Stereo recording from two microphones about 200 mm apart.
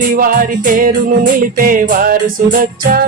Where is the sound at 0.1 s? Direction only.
45° right (ahead or behind).